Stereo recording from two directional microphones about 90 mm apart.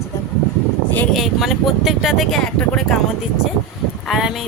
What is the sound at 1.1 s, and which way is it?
Speech, centre (ahead or behind).